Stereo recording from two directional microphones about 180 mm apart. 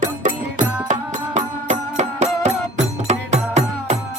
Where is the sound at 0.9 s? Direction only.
40° right (ahead or behind).